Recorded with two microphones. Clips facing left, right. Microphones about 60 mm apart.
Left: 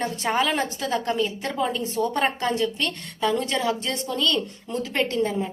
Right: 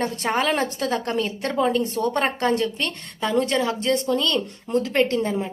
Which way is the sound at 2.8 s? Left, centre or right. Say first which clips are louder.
Left 1 dB; right.